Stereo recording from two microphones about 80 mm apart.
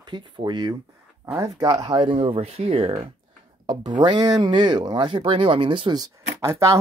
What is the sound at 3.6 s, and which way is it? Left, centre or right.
Speech, right.